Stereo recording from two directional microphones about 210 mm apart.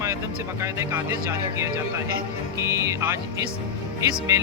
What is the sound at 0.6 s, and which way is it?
A man's voice, 15° right (ahead or behind).